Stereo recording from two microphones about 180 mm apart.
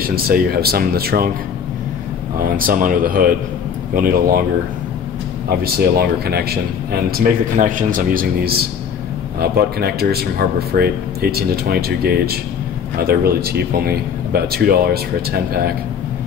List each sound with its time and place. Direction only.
0.0 s speech: 55° right (ahead or behind)
2.4 s speech: 50° right (ahead or behind)
5.5 s speech: 60° right (ahead or behind)